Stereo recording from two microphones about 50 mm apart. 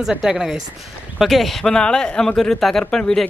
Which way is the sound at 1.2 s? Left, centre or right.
Centre.